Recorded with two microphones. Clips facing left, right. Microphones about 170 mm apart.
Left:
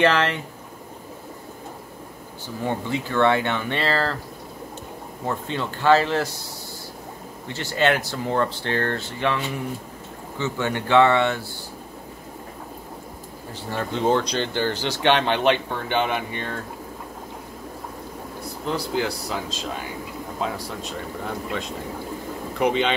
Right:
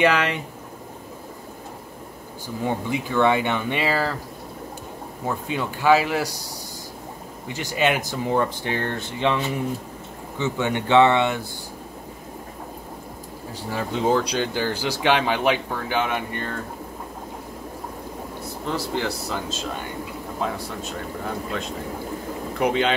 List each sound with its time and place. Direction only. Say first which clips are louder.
0.0 s speech: even; 10° right (ahead or behind)
2.6 s speech: right 1 dB; 15° right (ahead or behind)
5.2 s speech: even; 5° right (ahead or behind)
7.4 s speech: left 1 dB; 15° right (ahead or behind)
13.7 s speech: even; 5° right (ahead or behind)
18.4 s speech: left 1 dB; centre (ahead or behind)
22.6 s speech: even; centre (ahead or behind)